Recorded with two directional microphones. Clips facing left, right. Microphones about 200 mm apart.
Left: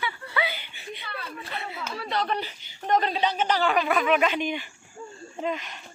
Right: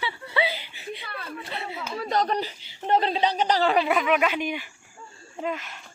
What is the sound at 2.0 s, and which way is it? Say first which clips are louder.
Speech: right 4 dB; 45° right (ahead or behind).